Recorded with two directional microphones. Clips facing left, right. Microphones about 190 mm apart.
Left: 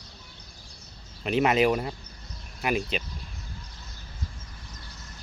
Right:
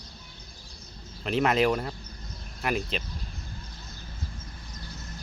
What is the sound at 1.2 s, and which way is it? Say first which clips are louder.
Speech: left 2 dB; 5° left (ahead or behind).